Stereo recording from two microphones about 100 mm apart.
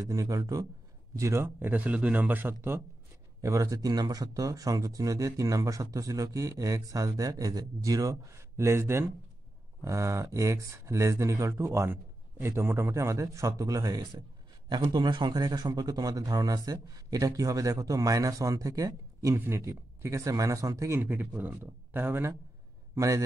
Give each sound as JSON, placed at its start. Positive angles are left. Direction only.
{"t": 0.0, "sound": "speech", "side_deg": -35}
{"t": 3.3, "sound": "a man's voice", "side_deg": -35}